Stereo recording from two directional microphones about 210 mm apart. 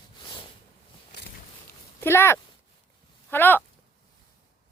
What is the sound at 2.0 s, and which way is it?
Speech, 10° left (ahead or behind).